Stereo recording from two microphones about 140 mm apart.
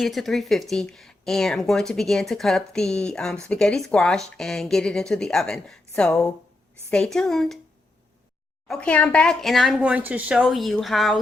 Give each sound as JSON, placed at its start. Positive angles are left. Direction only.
{"t": 0.0, "sound": "speech", "side_deg": 0}
{"t": 8.6, "sound": "speech", "side_deg": 10}
{"t": 9.8, "sound": "speech", "side_deg": -10}